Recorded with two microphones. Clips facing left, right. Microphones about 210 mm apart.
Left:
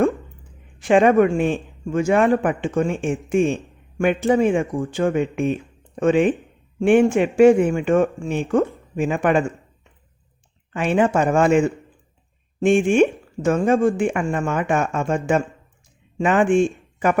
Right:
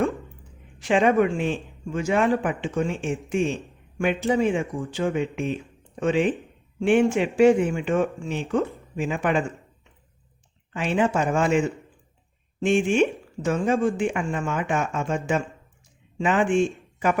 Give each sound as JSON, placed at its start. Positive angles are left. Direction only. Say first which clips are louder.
{"t": 0.8, "sound": "speech", "louder": "left 5 dB", "side_deg": 50}
{"t": 10.8, "sound": "speech", "louder": "left 5 dB", "side_deg": 55}